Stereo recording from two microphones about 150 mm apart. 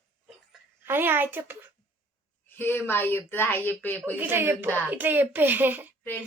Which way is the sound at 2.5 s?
15° left (ahead or behind).